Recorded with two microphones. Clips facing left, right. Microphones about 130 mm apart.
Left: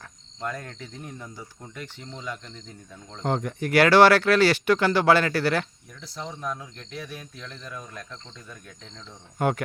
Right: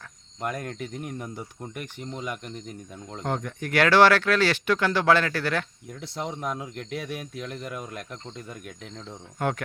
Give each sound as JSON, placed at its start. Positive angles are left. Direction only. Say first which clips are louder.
{"t": 0.3, "sound": "speech", "louder": "right 3 dB", "side_deg": -15}
{"t": 3.3, "sound": "speech", "louder": "left 4 dB", "side_deg": 5}
{"t": 5.9, "sound": "speech", "louder": "right 8 dB", "side_deg": -25}
{"t": 9.4, "sound": "speech", "louder": "left 3 dB", "side_deg": 5}